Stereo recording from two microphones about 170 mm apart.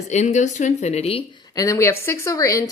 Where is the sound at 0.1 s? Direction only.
45° left (ahead or behind).